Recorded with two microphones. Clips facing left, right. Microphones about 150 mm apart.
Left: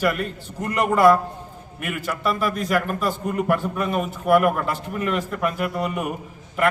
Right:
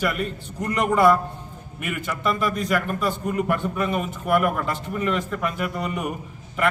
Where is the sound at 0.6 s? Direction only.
5° left (ahead or behind).